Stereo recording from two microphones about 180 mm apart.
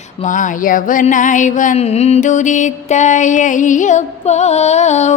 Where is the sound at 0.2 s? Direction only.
45° left (ahead or behind).